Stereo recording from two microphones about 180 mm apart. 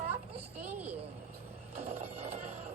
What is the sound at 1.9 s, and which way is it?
Speech, 35° right (ahead or behind).